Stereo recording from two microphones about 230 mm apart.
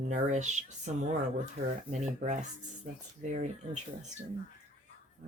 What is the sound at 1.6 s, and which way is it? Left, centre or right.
Speech, right.